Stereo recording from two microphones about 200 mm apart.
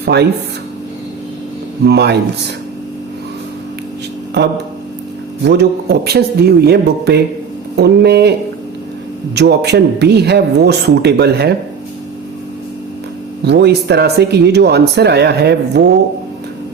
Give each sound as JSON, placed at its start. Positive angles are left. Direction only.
{"t": 0.0, "sound": "speech", "side_deg": -55}
{"t": 1.8, "sound": "speech", "side_deg": -55}
{"t": 5.5, "sound": "speech", "side_deg": -55}
{"t": 13.4, "sound": "speech", "side_deg": -55}